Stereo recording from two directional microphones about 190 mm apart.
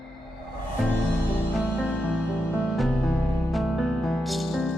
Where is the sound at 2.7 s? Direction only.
Centre (ahead or behind).